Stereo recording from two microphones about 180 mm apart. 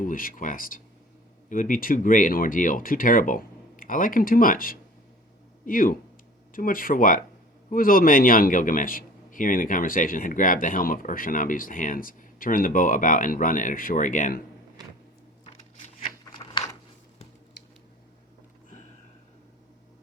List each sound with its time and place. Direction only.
0.0 s a man's voice: 50° left (ahead or behind)
16.0 s scissors: 30° left (ahead or behind)